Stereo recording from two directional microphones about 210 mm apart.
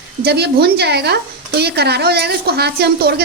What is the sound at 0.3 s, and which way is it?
Speech, 50° right (ahead or behind).